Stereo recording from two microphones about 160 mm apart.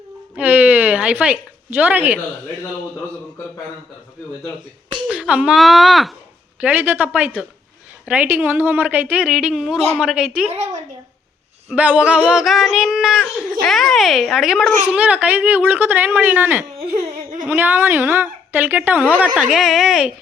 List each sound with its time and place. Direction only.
0.3 s speech: 10° right (ahead or behind)
5.0 s speech: 5° right (ahead or behind)
6.6 s speech: 10° right (ahead or behind)
11.7 s speech: 10° right (ahead or behind)